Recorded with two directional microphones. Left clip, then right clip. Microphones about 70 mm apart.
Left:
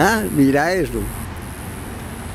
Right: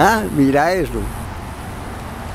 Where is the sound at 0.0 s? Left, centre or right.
Centre.